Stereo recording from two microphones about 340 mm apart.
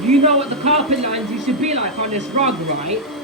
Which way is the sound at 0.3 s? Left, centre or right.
Centre.